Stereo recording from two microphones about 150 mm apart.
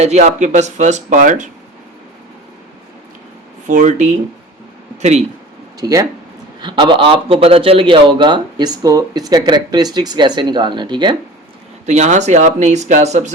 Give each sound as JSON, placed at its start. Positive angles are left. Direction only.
{"t": 0.0, "sound": "speech", "side_deg": -45}
{"t": 3.7, "sound": "speech", "side_deg": -55}
{"t": 5.8, "sound": "a man's voice", "side_deg": -25}
{"t": 11.9, "sound": "speech", "side_deg": -50}